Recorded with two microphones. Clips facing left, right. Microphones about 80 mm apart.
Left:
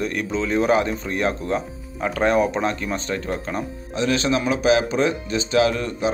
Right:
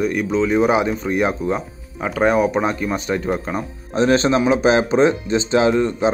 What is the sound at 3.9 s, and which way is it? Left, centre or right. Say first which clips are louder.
Speech: right 6 dB; right.